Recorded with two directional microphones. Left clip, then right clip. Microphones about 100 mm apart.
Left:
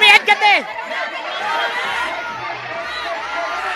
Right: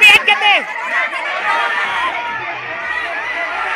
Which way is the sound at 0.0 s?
40° left (ahead or behind).